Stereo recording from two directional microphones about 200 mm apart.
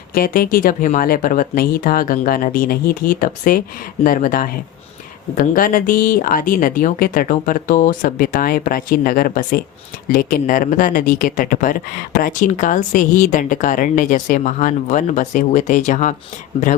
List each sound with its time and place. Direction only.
0.1 s speech: 45° left (ahead or behind)